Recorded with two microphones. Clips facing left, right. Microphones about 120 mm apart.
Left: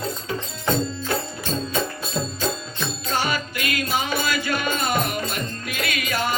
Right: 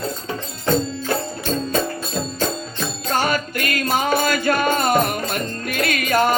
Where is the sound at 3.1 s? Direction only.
50° right (ahead or behind).